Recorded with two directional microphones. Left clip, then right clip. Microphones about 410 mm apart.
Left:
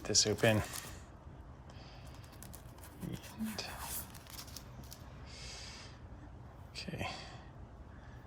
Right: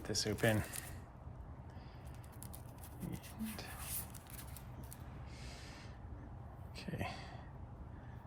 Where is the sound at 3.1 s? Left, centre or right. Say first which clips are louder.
Left 6 dB; centre.